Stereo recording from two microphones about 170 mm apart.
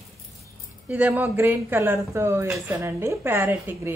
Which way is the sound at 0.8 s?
10° right (ahead or behind).